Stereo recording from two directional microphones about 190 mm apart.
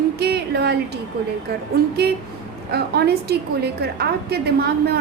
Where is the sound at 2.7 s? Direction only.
60° right (ahead or behind).